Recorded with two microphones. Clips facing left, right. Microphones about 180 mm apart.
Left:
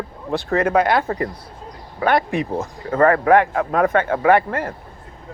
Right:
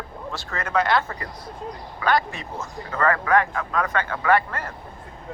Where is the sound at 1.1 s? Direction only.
30° left (ahead or behind).